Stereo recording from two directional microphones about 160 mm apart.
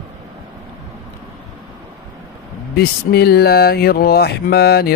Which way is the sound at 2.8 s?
80° left.